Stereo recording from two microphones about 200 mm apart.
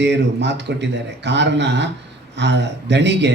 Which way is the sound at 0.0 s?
60° right (ahead or behind).